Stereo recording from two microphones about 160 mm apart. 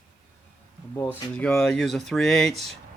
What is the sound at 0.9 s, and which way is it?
Speech, 15° left (ahead or behind).